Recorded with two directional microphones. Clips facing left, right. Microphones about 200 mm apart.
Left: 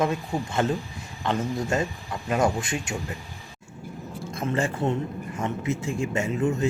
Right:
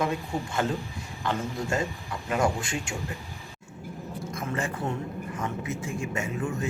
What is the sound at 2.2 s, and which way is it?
Speech, 20° left (ahead or behind).